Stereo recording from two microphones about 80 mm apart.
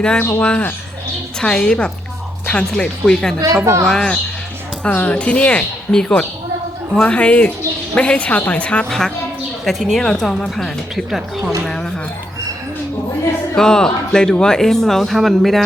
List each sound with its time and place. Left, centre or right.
0.3 s a woman's voice: centre
3.6 s speech: right
3.8 s a woman's voice: centre
8.9 s a woman's voice: centre
13.6 s speech: centre